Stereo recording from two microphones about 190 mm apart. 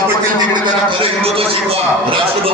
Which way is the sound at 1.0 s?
30° right (ahead or behind).